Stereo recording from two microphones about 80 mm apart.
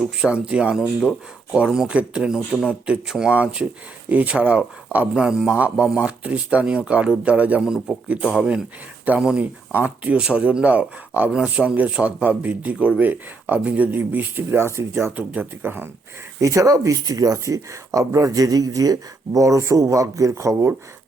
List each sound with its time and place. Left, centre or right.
0.0 s speech: centre
7.6 s speech: centre
9.0 s speech: centre; by 15.1 s right
15.1 s speech: right
16.4 s speech: right